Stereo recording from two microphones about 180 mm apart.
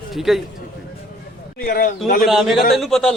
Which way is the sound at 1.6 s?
50° left (ahead or behind).